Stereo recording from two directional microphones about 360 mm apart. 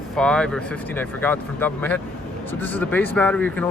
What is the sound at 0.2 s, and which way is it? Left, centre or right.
Speech, centre.